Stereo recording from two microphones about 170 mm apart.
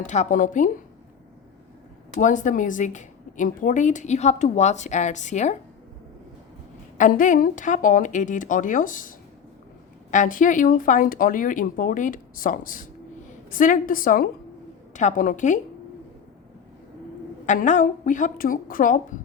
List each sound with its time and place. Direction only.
0.0 s a woman's voice: 45° left (ahead or behind)
2.2 s a woman's voice: 45° left (ahead or behind)
7.0 s a woman's voice: 50° left (ahead or behind)
17.4 s a woman's voice: 45° left (ahead or behind)